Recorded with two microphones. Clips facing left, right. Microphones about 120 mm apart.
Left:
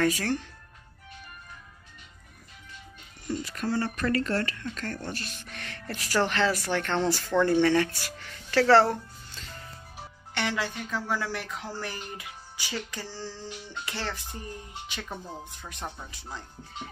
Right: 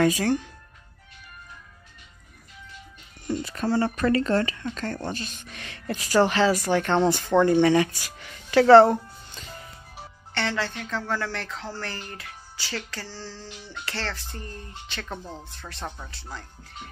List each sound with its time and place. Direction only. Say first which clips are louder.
0.0 s speech: right 5 dB; 15° right (ahead or behind)
3.3 s speech: right 4 dB; 25° right (ahead or behind)
10.3 s speech: right 2 dB; 10° left (ahead or behind)